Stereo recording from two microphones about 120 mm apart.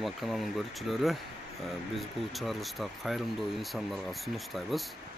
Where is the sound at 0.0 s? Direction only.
Centre (ahead or behind).